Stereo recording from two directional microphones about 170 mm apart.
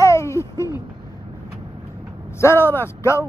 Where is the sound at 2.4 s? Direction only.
15° left (ahead or behind).